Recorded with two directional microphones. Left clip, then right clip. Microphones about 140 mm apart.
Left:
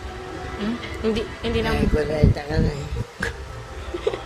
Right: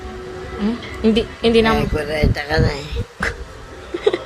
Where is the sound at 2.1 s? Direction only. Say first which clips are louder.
Right 5 dB; 10° left (ahead or behind).